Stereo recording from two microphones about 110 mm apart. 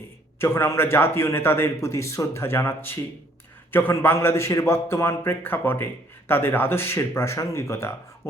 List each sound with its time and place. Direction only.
0.3 s a man's voice: 20° left (ahead or behind)